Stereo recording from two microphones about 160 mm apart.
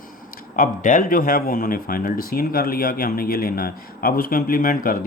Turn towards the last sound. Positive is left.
turn(degrees=60)  # may be behind; listen again after turning